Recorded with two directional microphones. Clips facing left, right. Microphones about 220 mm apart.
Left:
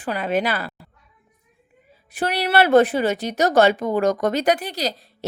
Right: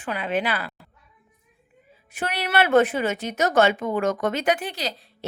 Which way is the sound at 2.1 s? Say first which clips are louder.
Left 4 dB; 35° left (ahead or behind).